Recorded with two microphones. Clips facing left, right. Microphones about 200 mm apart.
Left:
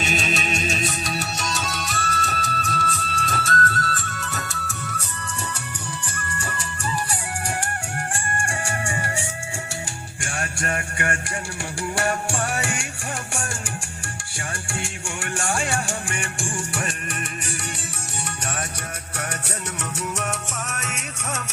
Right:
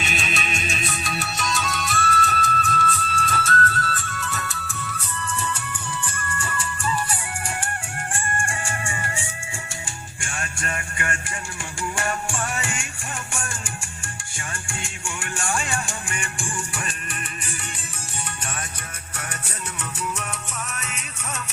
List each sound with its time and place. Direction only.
0.0 s music: 40° left (ahead or behind)
6.1 s music: 40° left (ahead or behind)
10.4 s music: 45° left (ahead or behind)
12.6 s music: 70° left (ahead or behind)
14.3 s music: 70° left (ahead or behind)
15.2 s music: 45° left (ahead or behind)
20.7 s music: 45° left (ahead or behind)